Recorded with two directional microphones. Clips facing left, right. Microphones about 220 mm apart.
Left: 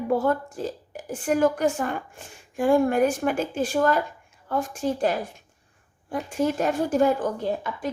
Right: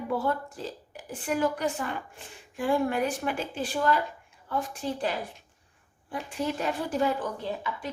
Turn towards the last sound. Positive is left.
turn(degrees=45)  # may be behind; listen again after turning